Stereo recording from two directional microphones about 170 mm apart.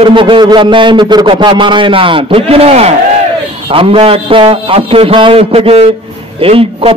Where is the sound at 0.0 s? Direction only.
30° right (ahead or behind).